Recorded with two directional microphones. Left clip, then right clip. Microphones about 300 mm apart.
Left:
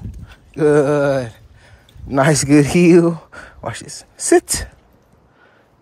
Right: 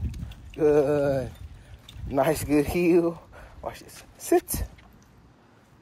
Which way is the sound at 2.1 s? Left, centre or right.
Left.